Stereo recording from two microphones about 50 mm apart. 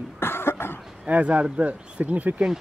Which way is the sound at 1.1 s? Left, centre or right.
Right.